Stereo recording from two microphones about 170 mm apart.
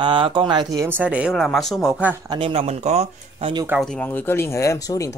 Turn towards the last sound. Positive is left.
turn(degrees=20)  # may be behind; listen again after turning